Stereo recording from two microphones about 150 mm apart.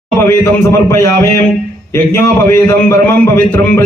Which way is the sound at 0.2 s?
20° left (ahead or behind).